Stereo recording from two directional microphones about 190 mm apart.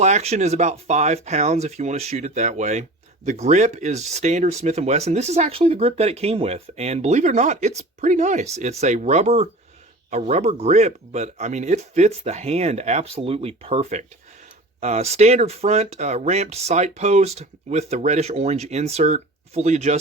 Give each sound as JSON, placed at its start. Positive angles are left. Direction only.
{"t": 0.0, "sound": "speech", "side_deg": -35}